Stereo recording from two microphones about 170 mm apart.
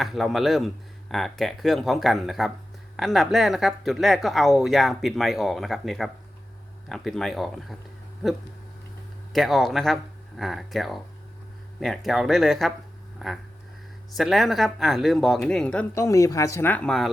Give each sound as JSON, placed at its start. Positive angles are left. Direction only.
{"t": 0.0, "sound": "speech", "side_deg": 0}
{"t": 9.3, "sound": "speech", "side_deg": 0}
{"t": 13.1, "sound": "a sound", "side_deg": 0}
{"t": 14.2, "sound": "speech", "side_deg": 0}
{"t": 16.0, "sound": "speech", "side_deg": 15}